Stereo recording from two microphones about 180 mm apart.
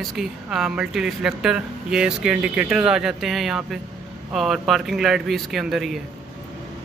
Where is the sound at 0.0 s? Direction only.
Centre (ahead or behind).